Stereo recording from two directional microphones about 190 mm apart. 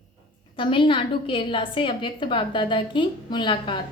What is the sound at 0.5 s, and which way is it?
A woman's voice, 25° left (ahead or behind).